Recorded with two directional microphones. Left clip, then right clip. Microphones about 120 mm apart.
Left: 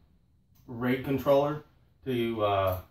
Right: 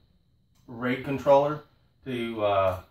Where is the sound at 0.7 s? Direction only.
30° right (ahead or behind).